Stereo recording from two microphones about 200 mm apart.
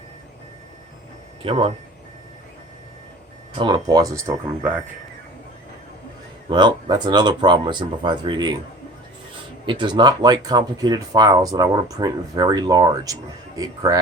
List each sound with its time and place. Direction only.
1.4 s speech: 25° right (ahead or behind)
3.6 s speech: 20° right (ahead or behind)
6.5 s speech: 20° right (ahead or behind)
9.6 s speech: 25° right (ahead or behind)